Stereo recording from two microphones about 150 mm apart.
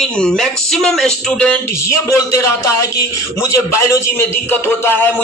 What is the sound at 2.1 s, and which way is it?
Music, 20° left (ahead or behind).